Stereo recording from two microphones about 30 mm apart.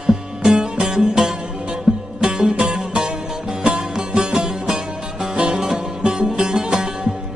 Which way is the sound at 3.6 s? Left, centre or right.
Right.